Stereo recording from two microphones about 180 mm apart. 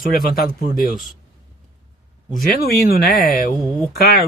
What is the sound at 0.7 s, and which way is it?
Speech, centre (ahead or behind).